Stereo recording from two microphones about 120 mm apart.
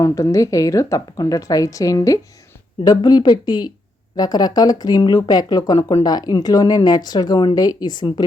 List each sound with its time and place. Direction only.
0.0 s a woman's voice: 25° left (ahead or behind)